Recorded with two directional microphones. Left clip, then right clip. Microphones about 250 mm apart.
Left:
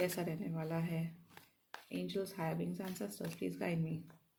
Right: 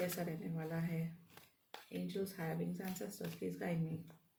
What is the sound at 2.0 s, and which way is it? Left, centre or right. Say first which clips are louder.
Speech: left 3 dB; left.